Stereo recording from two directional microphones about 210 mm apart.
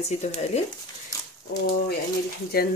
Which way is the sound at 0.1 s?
30° left (ahead or behind).